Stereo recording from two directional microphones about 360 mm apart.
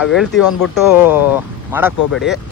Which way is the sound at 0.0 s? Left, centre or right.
Centre.